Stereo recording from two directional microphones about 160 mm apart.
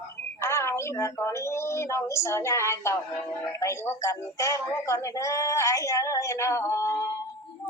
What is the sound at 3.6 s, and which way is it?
Music, 15° left (ahead or behind).